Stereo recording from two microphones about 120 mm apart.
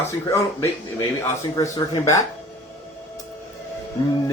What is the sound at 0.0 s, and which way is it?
Speech, 20° left (ahead or behind).